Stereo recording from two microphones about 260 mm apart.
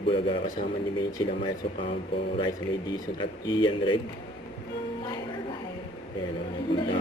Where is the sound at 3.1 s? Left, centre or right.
Centre.